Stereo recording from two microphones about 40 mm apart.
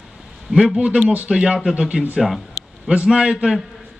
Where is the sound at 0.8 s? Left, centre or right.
Right.